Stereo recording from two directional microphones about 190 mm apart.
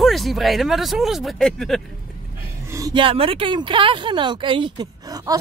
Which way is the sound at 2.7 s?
20° right (ahead or behind).